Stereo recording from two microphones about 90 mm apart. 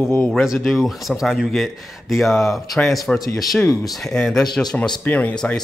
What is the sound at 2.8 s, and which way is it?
Speech, 5° left (ahead or behind).